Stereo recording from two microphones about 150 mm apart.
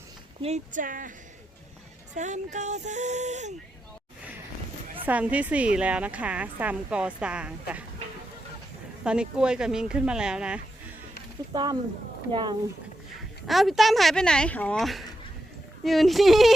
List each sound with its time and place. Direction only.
0.4 s speech: 55° right (ahead or behind)
2.1 s speech: 50° right (ahead or behind)
5.0 s a woman's voice: 10° right (ahead or behind)
9.0 s speech: 5° right (ahead or behind)
11.5 s speech: 30° right (ahead or behind)
13.5 s speech: centre (ahead or behind)